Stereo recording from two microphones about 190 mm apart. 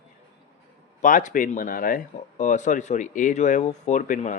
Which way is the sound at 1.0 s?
45° left (ahead or behind).